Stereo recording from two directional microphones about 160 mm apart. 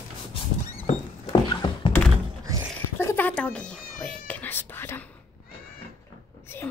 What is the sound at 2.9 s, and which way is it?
Whispering, 15° left (ahead or behind).